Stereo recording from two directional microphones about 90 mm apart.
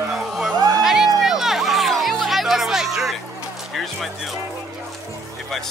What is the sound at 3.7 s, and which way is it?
Speech, centre (ahead or behind).